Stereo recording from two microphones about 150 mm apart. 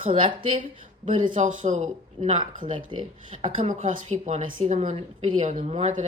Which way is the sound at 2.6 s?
35° right (ahead or behind).